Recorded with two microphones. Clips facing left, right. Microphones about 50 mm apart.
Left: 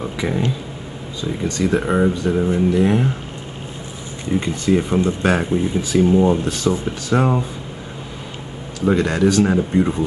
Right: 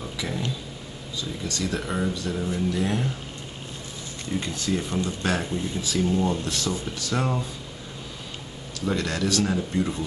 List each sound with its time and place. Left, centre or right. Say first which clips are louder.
0.0 s a sound: left 9 dB; left
1.2 s speech: left 10 dB; left
4.3 s speech: left 9 dB; left
8.8 s speech: left 10 dB; left